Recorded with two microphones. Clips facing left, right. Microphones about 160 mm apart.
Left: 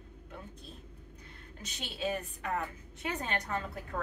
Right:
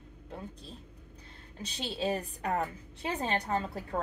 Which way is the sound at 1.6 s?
30° right (ahead or behind).